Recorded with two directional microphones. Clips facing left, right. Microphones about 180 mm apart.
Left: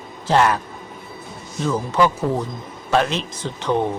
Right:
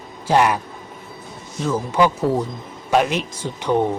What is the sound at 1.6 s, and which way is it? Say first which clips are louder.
Speech: even; 10° right (ahead or behind).